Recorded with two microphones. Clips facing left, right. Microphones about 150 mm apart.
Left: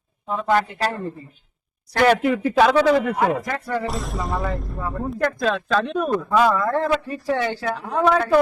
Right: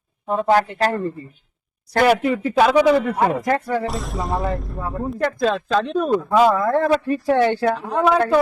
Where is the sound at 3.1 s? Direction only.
45° right (ahead or behind).